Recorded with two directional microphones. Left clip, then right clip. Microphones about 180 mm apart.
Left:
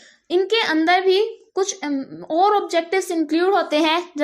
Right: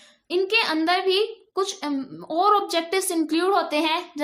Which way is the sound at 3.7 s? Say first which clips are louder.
Left 5 dB; 30° left (ahead or behind).